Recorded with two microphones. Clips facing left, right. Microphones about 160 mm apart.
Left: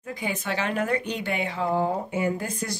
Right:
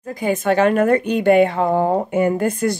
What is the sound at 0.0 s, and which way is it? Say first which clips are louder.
A woman's voice: right 11 dB; 45° right (ahead or behind).